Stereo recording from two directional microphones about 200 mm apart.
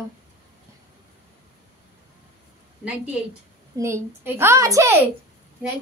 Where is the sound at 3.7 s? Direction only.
15° right (ahead or behind).